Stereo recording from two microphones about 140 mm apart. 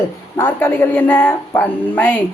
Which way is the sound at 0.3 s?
15° left (ahead or behind).